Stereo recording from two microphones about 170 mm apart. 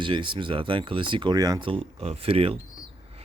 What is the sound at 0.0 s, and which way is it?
Speech, 30° right (ahead or behind).